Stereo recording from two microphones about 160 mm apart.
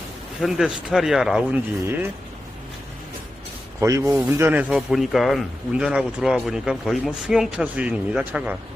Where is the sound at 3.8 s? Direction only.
20° right (ahead or behind).